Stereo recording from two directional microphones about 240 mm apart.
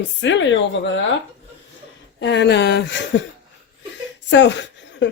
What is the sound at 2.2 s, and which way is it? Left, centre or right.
Speech, left.